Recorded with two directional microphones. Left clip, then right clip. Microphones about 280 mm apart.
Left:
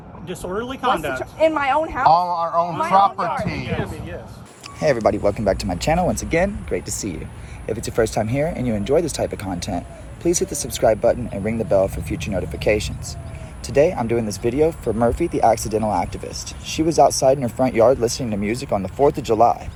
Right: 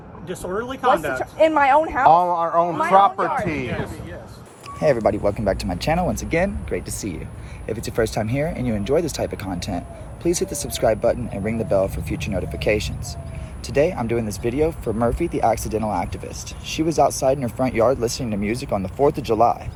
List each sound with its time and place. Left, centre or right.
0.3 s speech: left
4.8 s speech: centre